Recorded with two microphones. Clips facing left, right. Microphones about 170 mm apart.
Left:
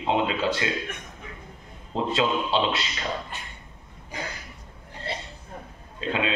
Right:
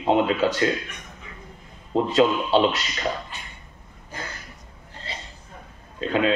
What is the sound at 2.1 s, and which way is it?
Speech, 45° right (ahead or behind).